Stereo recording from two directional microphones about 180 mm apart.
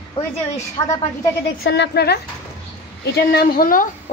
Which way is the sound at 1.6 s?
70° left (ahead or behind).